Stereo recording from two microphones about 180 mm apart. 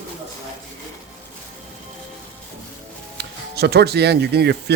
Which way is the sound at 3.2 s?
65° right (ahead or behind).